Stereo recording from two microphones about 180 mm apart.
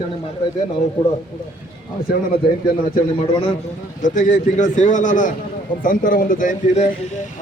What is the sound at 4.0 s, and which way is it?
A man's voice, 45° left (ahead or behind).